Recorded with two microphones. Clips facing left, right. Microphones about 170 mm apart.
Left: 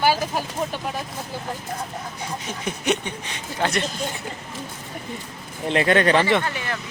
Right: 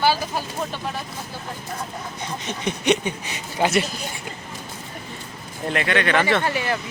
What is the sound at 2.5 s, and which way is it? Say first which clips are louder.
Speech: right 4 dB; 5° left (ahead or behind).